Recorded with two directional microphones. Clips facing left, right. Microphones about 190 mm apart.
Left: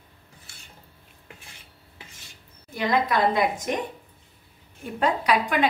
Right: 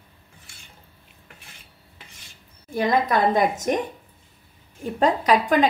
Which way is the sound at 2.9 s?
45° right (ahead or behind).